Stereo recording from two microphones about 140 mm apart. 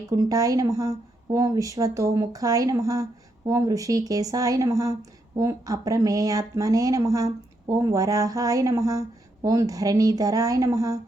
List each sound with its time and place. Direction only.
0.1 s speech: 25° right (ahead or behind)